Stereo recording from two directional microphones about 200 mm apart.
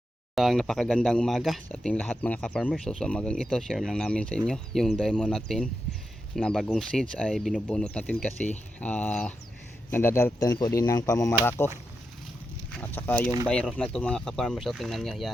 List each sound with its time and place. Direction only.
0.3 s speech: centre (ahead or behind)